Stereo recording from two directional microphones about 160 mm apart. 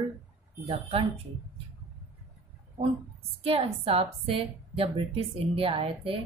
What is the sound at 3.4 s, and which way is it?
A woman's voice, 35° right (ahead or behind).